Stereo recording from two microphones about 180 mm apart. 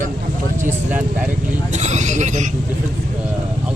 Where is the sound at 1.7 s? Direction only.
40° right (ahead or behind).